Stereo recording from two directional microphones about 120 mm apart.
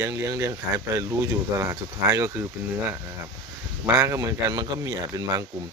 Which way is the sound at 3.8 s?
25° right (ahead or behind).